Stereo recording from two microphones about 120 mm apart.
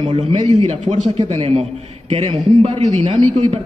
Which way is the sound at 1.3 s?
55° right (ahead or behind).